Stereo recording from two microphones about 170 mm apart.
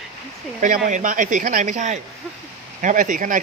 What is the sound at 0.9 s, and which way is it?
Speech, 50° right (ahead or behind).